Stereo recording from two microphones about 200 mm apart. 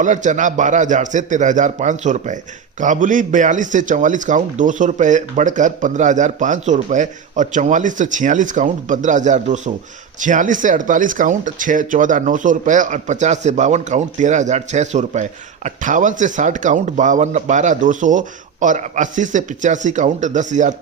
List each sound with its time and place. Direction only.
0.0 s a man's voice: 40° right (ahead or behind)